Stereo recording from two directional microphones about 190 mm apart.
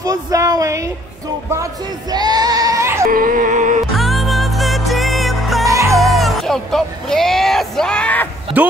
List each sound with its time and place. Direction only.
0.0 s speech: 20° right (ahead or behind)
3.1 s a sound: 45° right (ahead or behind)
3.9 s music: centre (ahead or behind)
5.7 s music: 15° right (ahead or behind)
5.9 s a sound: centre (ahead or behind)
8.6 s speech: 10° right (ahead or behind)